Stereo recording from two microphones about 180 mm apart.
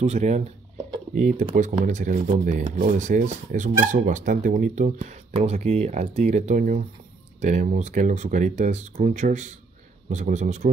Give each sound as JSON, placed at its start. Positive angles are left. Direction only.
{"t": 0.0, "sound": "speech", "side_deg": -40}